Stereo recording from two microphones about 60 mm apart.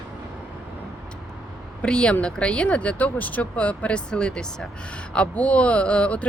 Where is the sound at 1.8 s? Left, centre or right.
Centre.